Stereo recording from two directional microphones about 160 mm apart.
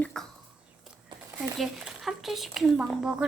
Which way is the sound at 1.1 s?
30° right (ahead or behind).